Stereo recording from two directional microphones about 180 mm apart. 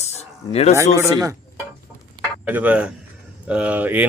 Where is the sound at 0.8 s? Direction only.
15° right (ahead or behind).